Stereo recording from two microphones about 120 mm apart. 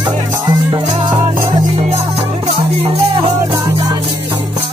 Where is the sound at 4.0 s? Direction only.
55° right (ahead or behind).